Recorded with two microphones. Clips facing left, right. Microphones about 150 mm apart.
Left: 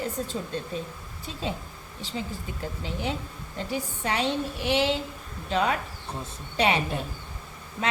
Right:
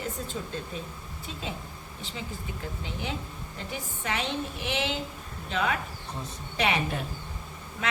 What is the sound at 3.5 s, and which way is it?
A woman's voice, 35° left (ahead or behind).